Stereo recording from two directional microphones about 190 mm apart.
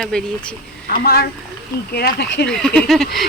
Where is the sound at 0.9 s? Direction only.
50° left (ahead or behind).